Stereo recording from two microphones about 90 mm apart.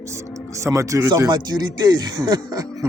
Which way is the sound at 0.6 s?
35° right (ahead or behind).